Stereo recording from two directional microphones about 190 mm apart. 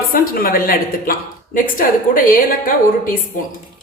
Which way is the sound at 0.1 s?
50° left (ahead or behind).